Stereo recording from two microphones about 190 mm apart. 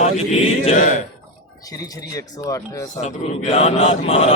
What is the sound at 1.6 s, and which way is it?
Speech, 20° left (ahead or behind).